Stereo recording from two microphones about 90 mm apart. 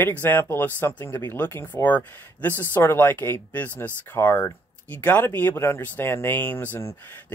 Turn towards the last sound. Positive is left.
turn(degrees=25)  # may be behind; listen again after turning